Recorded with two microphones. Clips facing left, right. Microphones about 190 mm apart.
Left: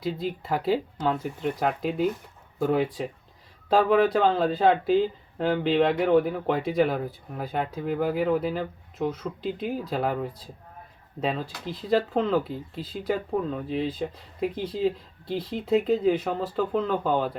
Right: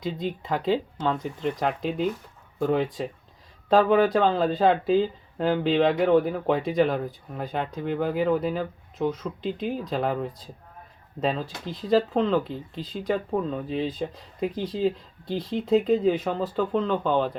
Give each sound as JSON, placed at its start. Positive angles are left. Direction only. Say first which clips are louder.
{"t": 0.0, "sound": "speech", "louder": "even", "side_deg": 5}